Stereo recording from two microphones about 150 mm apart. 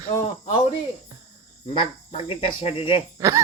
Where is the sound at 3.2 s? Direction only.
20° right (ahead or behind).